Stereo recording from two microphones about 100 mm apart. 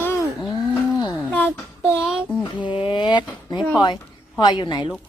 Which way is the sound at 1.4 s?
5° right (ahead or behind).